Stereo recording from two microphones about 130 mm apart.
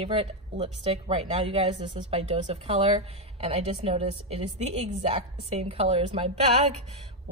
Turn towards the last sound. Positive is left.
turn(degrees=-55)  # may be behind; listen again after turning